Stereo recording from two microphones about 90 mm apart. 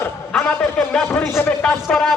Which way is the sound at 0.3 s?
10° left (ahead or behind).